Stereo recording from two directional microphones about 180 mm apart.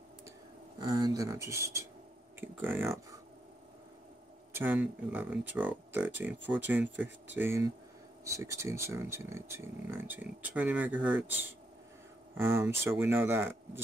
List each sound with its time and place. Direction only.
0.7 s speech: 25° right (ahead or behind)
4.6 s speech: 10° right (ahead or behind)